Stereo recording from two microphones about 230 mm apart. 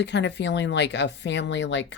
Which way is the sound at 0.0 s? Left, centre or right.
Left.